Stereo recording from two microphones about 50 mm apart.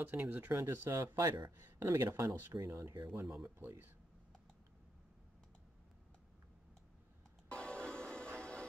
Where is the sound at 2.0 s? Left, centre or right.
Right.